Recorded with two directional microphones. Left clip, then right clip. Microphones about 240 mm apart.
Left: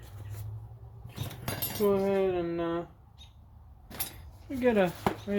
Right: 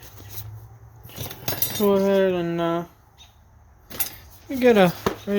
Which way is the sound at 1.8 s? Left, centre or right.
Right.